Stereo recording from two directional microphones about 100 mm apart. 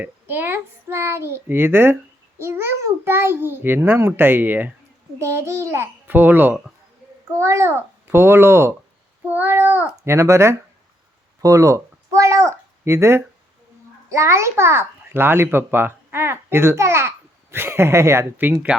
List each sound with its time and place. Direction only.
0.0 s a child's voice: 20° right (ahead or behind)
5.2 s a child's voice: 30° right (ahead or behind)
7.3 s a child's voice: 30° right (ahead or behind)